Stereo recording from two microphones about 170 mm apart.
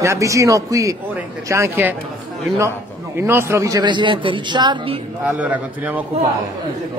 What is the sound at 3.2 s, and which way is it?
A man's voice, 15° right (ahead or behind).